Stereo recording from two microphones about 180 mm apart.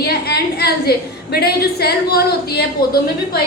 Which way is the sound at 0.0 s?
60° left (ahead or behind).